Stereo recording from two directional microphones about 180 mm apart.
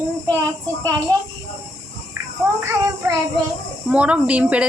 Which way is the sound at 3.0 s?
15° right (ahead or behind).